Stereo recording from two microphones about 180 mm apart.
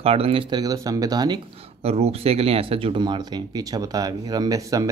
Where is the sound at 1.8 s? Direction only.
35° right (ahead or behind).